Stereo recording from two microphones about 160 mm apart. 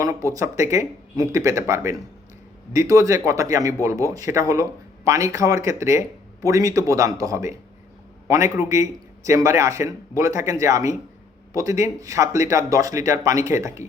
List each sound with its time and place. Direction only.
0.0 s a man's voice: 20° right (ahead or behind)